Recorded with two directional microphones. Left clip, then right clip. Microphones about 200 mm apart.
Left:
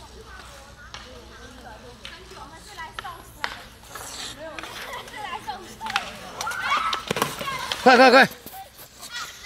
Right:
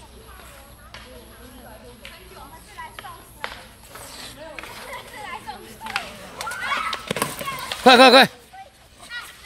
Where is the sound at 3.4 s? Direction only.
50° left (ahead or behind).